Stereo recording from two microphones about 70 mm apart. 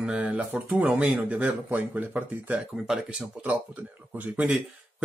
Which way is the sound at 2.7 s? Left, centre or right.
Centre.